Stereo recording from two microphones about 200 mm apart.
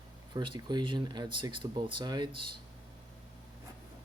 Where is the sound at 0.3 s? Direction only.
25° right (ahead or behind).